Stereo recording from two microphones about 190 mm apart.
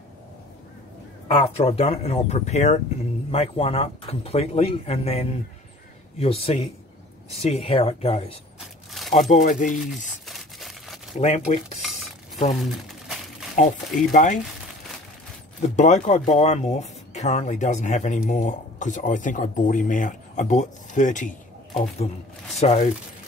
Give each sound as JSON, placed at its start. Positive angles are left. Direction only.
{"t": 1.3, "sound": "speech", "side_deg": 30}
{"t": 8.5, "sound": "a sound", "side_deg": 0}
{"t": 9.3, "sound": "speech", "side_deg": 45}
{"t": 10.2, "sound": "crumpling", "side_deg": 0}
{"t": 11.1, "sound": "speech", "side_deg": 35}
{"t": 12.6, "sound": "crumpling", "side_deg": 0}
{"t": 14.1, "sound": "speech", "side_deg": 40}
{"t": 15.6, "sound": "speech", "side_deg": 40}